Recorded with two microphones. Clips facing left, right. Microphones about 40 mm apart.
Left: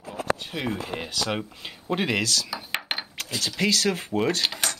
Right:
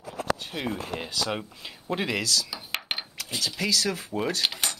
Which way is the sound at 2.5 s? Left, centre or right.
Centre.